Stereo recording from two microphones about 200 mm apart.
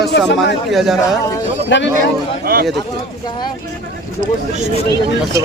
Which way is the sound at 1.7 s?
65° left (ahead or behind).